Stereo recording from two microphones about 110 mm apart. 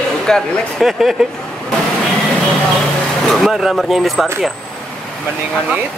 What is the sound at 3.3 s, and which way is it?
Speech, centre (ahead or behind).